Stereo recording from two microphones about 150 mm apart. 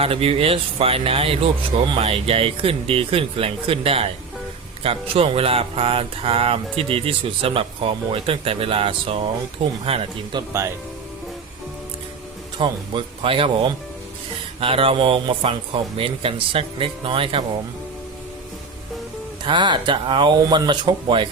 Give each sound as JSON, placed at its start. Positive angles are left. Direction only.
{"t": 0.0, "sound": "speech", "side_deg": -40}
{"t": 12.5, "sound": "speech", "side_deg": -35}
{"t": 19.5, "sound": "speech", "side_deg": -30}